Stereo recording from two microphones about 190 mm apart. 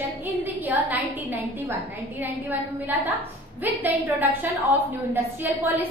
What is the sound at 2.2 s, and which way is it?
A woman's voice, 10° right (ahead or behind).